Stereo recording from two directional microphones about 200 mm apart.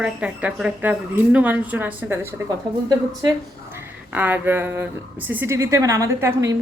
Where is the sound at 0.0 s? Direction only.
5° right (ahead or behind).